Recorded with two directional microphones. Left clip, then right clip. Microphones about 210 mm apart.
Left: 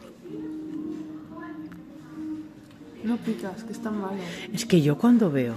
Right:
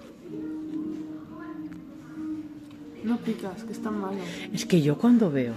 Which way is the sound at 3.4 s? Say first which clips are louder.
Even; centre (ahead or behind).